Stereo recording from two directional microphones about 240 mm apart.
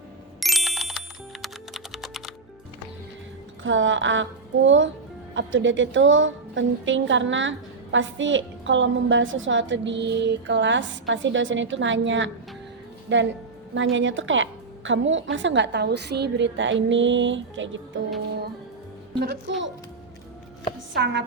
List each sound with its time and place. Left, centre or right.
0.3 s computer keyboard: centre
3.6 s a woman's voice: right
19.2 s music: right
20.9 s a woman's voice: right